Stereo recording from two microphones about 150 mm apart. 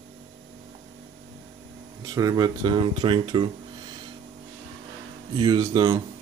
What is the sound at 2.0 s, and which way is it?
Speech, 25° right (ahead or behind).